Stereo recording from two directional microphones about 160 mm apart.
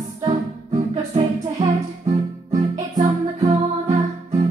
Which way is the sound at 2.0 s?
20° right (ahead or behind).